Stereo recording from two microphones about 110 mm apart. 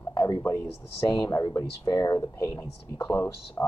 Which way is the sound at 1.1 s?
35° left (ahead or behind).